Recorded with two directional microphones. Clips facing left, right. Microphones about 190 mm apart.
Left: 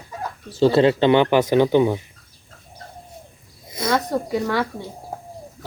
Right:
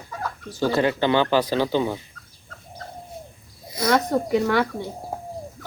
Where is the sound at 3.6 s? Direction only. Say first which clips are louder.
Right 1 dB; 25° left (ahead or behind).